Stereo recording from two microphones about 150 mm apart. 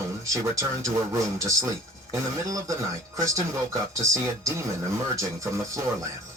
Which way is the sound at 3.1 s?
20° right (ahead or behind).